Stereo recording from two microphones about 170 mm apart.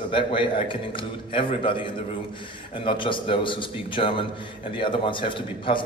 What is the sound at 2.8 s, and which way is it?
A man's voice, 30° left (ahead or behind).